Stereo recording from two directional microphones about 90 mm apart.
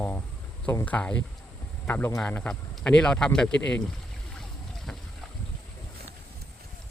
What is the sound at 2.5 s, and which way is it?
Speech, 10° left (ahead or behind).